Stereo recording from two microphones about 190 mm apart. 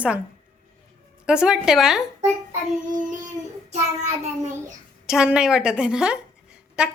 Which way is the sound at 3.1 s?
40° right (ahead or behind).